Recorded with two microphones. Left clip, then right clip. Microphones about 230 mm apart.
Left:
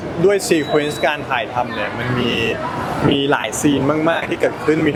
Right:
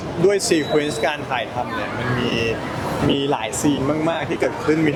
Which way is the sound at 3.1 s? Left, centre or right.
Centre.